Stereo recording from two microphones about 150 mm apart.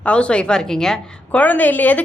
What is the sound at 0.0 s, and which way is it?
A woman's voice, 10° left (ahead or behind).